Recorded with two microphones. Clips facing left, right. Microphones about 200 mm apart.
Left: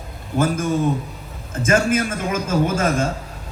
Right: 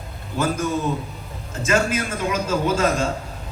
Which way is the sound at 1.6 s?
50° left (ahead or behind).